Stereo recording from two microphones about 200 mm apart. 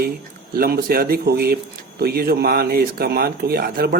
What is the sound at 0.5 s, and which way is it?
Speech, 45° right (ahead or behind).